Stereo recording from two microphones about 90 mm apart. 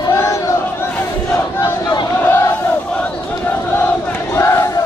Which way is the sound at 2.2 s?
25° left (ahead or behind).